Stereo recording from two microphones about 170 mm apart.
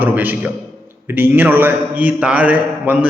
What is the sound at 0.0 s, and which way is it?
A man's voice, 10° right (ahead or behind).